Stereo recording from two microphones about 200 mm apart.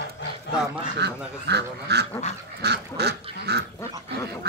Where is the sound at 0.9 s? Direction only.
55° right (ahead or behind).